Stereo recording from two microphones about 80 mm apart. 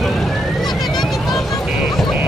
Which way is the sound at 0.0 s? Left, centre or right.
Centre.